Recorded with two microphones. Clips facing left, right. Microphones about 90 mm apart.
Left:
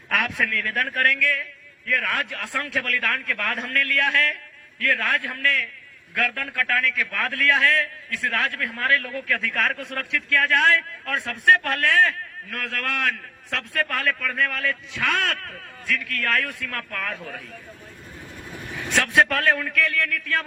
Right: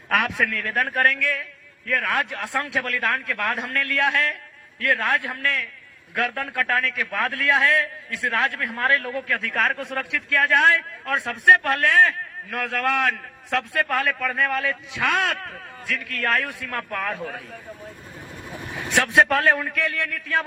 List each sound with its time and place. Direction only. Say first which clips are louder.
0.1 s a man's voice: right 2 dB; 10° right (ahead or behind)
18.4 s a man's voice: right 1 dB; 20° right (ahead or behind)